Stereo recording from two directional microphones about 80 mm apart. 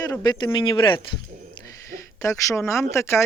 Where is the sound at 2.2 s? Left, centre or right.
Left.